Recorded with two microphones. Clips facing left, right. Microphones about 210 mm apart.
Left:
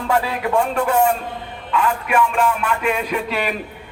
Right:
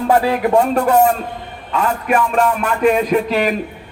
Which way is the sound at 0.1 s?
40° right (ahead or behind).